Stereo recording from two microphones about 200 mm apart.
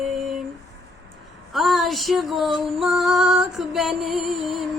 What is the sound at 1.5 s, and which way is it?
Music, centre (ahead or behind).